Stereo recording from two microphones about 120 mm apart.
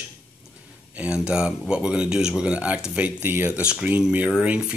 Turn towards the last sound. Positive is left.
turn(degrees=-10)  # may be behind; listen again after turning